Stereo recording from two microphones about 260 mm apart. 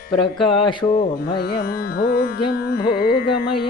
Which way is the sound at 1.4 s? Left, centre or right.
Left.